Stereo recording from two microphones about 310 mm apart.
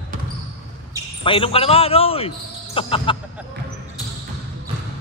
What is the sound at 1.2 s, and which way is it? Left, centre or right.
Speech, centre.